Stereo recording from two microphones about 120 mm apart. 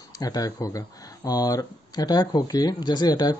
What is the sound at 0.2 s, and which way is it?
Speech, 30° left (ahead or behind).